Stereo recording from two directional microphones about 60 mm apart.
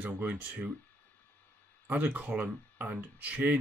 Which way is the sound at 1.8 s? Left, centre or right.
Right.